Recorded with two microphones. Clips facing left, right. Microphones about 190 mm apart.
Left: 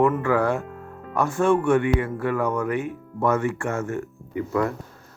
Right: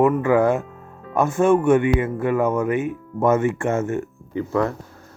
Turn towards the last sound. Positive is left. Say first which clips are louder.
# right 2 dB
turn(degrees=-25)  # may be behind; listen again after turning